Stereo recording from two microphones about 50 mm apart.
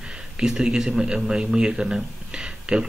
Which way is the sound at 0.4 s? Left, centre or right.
Centre.